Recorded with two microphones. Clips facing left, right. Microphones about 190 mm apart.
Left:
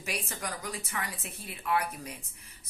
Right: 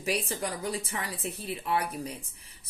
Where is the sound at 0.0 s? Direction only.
35° right (ahead or behind).